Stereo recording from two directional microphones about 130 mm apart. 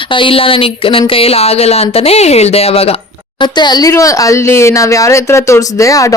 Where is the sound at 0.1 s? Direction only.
40° left (ahead or behind).